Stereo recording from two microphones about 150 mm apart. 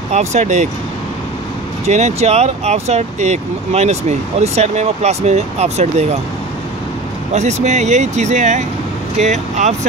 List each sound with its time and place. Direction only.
0.1 s speech: 50° right (ahead or behind)
1.9 s speech: 50° right (ahead or behind)
7.3 s speech: 50° right (ahead or behind)